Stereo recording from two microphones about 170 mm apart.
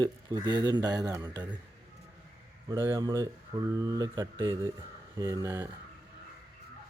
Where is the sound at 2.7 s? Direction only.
20° right (ahead or behind).